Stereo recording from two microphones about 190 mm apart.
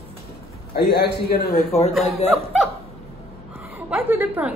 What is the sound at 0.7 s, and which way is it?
Speech, 60° left (ahead or behind).